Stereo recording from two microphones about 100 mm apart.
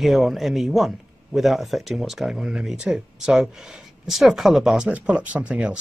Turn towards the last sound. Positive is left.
turn(degrees=-10)  # may be behind; listen again after turning